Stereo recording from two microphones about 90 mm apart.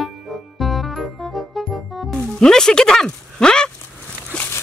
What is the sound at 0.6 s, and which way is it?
Music, centre (ahead or behind).